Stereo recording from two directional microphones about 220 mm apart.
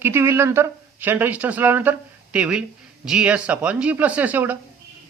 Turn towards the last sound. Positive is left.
turn(degrees=-5)  # may be behind; listen again after turning